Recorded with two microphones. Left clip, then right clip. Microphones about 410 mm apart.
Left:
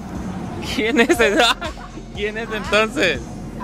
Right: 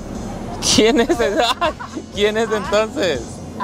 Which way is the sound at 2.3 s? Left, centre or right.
Centre.